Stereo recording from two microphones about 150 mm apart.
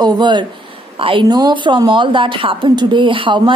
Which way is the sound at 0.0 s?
30° right (ahead or behind).